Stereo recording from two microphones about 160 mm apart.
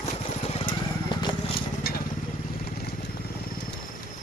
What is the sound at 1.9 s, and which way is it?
Vehicle, 75° left (ahead or behind).